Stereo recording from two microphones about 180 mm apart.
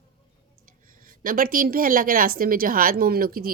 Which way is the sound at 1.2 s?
50° right (ahead or behind).